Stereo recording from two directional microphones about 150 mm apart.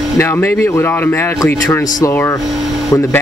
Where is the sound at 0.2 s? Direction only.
15° left (ahead or behind).